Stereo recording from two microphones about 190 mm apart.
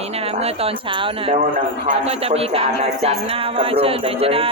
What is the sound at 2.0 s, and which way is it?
Music, 30° right (ahead or behind).